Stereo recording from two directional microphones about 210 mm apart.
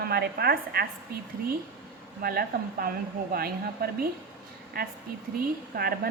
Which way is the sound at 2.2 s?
45° right (ahead or behind).